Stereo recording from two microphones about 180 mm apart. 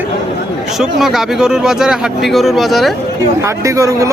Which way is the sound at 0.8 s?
Centre (ahead or behind).